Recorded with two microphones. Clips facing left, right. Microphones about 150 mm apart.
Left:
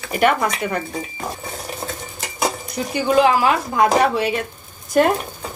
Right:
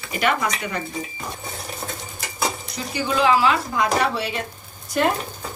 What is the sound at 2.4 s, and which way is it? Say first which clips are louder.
Speech: left 4 dB; 55° left (ahead or behind).